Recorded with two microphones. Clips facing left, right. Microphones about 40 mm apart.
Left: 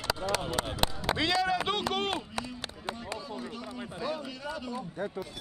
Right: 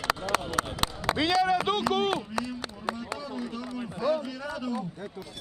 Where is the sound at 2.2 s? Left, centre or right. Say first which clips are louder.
Right 4 dB; left.